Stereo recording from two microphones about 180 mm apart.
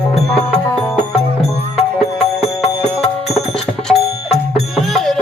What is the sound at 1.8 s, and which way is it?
Music, 35° left (ahead or behind).